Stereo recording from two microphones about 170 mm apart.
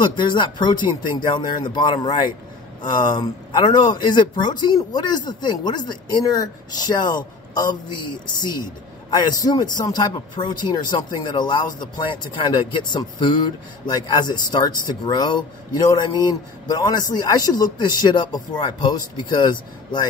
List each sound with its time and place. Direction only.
0.1 s speech: 25° left (ahead or behind)
9.1 s speech: 25° left (ahead or behind)